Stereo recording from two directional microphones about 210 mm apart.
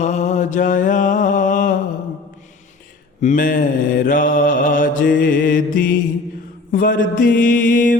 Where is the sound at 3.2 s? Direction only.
40° left (ahead or behind).